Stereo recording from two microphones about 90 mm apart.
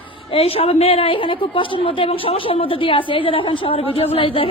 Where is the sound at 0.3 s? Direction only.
90° left.